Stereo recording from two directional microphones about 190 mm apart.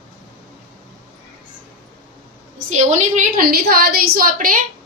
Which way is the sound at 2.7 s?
40° right (ahead or behind).